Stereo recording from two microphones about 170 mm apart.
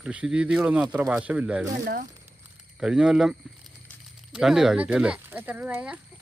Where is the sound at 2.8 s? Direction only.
5° right (ahead or behind).